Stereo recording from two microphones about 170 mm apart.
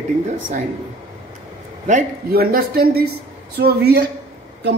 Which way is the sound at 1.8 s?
55° right (ahead or behind).